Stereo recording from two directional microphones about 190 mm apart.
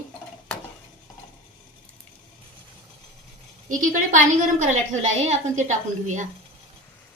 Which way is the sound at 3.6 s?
40° right (ahead or behind).